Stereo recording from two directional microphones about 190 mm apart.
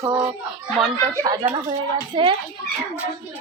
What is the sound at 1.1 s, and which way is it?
A woman's voice, 15° right (ahead or behind).